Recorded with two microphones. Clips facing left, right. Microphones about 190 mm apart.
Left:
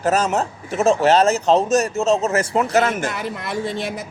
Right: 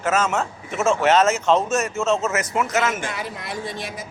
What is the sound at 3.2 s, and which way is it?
Speech, 60° left (ahead or behind).